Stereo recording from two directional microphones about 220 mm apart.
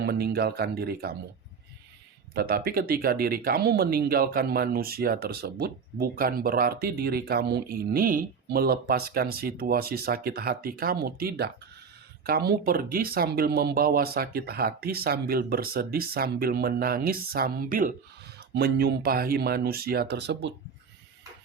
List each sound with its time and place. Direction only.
0.0 s speech: 45° right (ahead or behind)
2.3 s speech: 45° right (ahead or behind)